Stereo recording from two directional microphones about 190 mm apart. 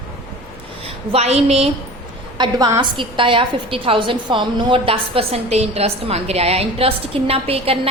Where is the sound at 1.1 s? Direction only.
35° right (ahead or behind).